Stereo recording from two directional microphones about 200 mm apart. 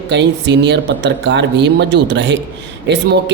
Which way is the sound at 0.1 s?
60° right (ahead or behind).